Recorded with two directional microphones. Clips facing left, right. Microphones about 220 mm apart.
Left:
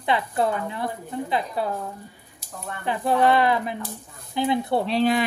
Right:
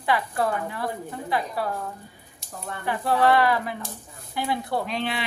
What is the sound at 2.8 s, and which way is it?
Speech, 20° left (ahead or behind).